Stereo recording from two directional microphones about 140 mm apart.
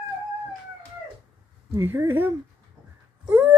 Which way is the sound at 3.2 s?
15° right (ahead or behind).